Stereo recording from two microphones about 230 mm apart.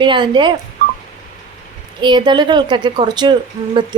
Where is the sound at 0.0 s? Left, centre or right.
Right.